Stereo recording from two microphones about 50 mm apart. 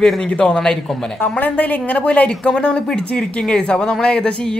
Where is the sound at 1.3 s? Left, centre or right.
Left.